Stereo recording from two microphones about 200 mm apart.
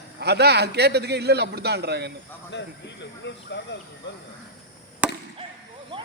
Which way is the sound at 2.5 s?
60° left (ahead or behind).